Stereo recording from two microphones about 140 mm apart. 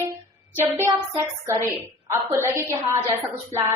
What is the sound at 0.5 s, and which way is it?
Speech, 15° right (ahead or behind).